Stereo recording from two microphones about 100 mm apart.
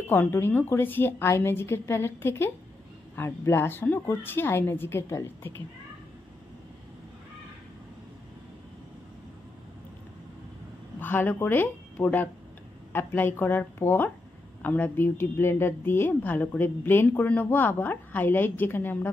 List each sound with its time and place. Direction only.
0.1 s a woman's voice: 20° left (ahead or behind)
11.0 s a woman's voice: 20° left (ahead or behind)